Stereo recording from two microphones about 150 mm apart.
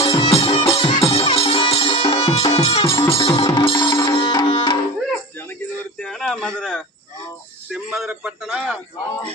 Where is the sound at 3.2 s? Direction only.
30° left (ahead or behind).